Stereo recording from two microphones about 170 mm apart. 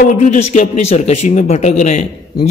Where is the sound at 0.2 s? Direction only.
45° left (ahead or behind).